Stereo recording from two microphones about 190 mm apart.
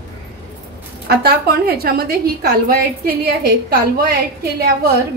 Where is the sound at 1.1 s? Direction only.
55° right (ahead or behind).